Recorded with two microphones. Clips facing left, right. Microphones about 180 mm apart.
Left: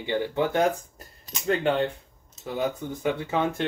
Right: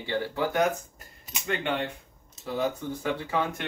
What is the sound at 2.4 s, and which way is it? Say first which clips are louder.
Speech: left 1 dB; 20° left (ahead or behind).